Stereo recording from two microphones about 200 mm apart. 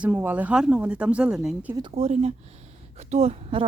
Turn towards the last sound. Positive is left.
turn(degrees=-30)  # may be behind; listen again after turning